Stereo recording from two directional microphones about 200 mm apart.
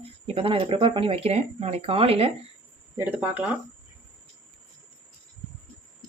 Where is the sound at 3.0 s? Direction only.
5° right (ahead or behind).